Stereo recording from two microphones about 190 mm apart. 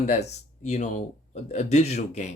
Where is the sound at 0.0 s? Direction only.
35° left (ahead or behind).